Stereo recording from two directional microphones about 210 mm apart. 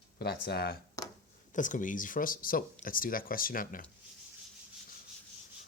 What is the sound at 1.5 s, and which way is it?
Speech, 35° left (ahead or behind).